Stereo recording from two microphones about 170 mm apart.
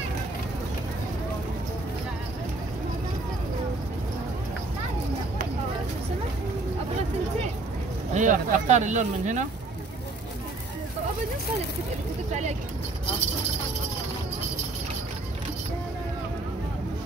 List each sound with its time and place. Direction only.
8.1 s speech: 45° right (ahead or behind)